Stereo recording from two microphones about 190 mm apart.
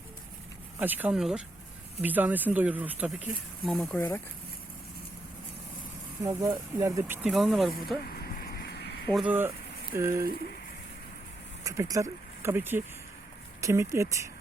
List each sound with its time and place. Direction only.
0.8 s speech: 10° right (ahead or behind); by 4.2 s 10° left (ahead or behind)
6.2 s speech: 20° right (ahead or behind); by 7.9 s centre (ahead or behind)
8.0 s vehicle: 50° left (ahead or behind)
9.1 s speech: 10° right (ahead or behind)
11.6 s speech: 15° right (ahead or behind)